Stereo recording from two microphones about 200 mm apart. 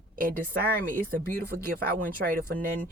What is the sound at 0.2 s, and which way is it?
Speech, 45° right (ahead or behind).